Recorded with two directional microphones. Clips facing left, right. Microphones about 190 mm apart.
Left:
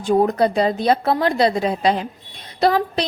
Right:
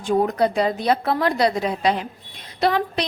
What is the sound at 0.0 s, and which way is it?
A woman's voice, 30° left (ahead or behind).